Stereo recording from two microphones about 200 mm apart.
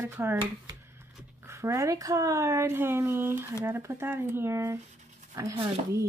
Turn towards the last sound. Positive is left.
turn(degrees=-15)  # may be behind; listen again after turning